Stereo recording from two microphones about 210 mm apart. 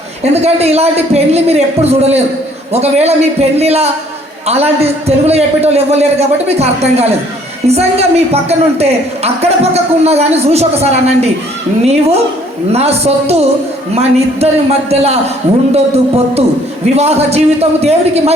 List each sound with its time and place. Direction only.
0.4 s a woman's voice: 30° right (ahead or behind)